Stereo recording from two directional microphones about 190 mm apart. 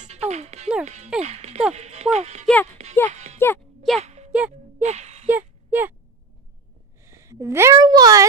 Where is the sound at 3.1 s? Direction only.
35° right (ahead or behind).